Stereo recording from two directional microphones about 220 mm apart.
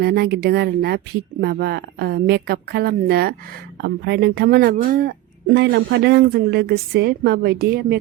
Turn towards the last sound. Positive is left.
turn(degrees=-45)  # may be behind; listen again after turning